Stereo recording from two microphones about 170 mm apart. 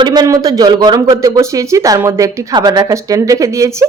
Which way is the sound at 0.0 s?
25° right (ahead or behind).